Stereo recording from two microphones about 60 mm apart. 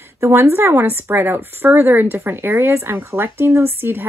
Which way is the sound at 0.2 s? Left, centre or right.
Right.